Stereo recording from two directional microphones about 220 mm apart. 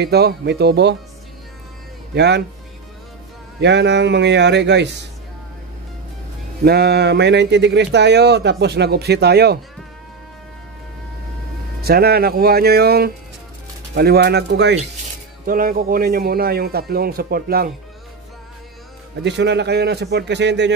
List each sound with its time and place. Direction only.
0.0 s speech: 45° right (ahead or behind)
2.1 s speech: 50° right (ahead or behind)
3.6 s speech: 50° right (ahead or behind)
6.6 s speech: 45° right (ahead or behind)
11.8 s speech: 45° right (ahead or behind)
15.4 s speech: 40° right (ahead or behind)
19.2 s speech: 50° right (ahead or behind)